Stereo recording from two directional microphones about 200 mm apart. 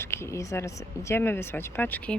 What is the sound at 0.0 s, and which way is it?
Speech, 10° left (ahead or behind).